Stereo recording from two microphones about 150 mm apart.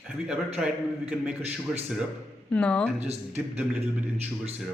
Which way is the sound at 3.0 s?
45° right (ahead or behind).